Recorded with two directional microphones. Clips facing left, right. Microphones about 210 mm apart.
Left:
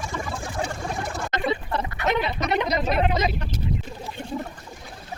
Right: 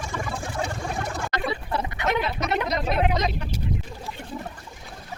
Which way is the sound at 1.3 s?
20° left (ahead or behind).